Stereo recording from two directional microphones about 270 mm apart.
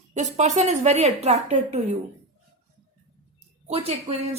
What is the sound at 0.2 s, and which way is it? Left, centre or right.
A woman's voice, right.